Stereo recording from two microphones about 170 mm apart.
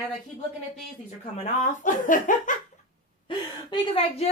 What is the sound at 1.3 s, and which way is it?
Speech, 50° left (ahead or behind).